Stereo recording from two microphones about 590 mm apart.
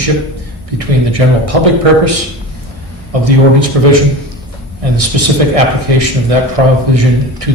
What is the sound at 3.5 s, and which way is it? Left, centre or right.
Speech, right.